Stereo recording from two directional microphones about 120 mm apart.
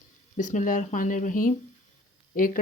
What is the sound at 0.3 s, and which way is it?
Speech, 90° left.